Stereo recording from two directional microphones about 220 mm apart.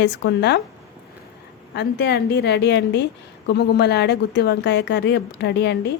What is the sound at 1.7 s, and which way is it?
A woman's voice, 50° left (ahead or behind).